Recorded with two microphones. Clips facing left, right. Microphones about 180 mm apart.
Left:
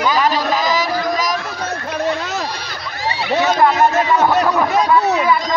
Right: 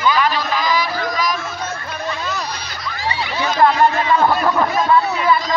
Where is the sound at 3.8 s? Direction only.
20° left (ahead or behind).